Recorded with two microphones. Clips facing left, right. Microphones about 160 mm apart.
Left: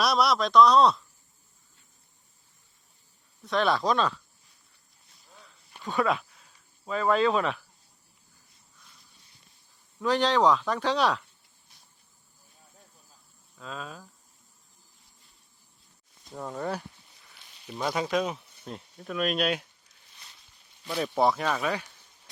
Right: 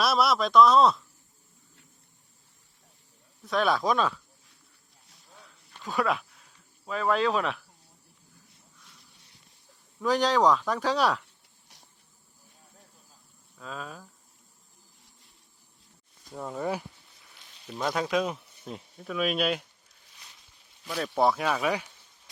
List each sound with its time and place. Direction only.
0.0 s speech: centre (ahead or behind)
3.4 s speech: centre (ahead or behind)
5.8 s speech: centre (ahead or behind)
10.0 s speech: 5° right (ahead or behind)
11.7 s a sound: 90° right
13.6 s speech: 5° right (ahead or behind)
16.3 s speech: centre (ahead or behind)
20.8 s speech: centre (ahead or behind)